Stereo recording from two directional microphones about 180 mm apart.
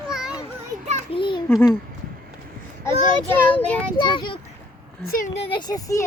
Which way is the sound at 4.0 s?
25° left (ahead or behind).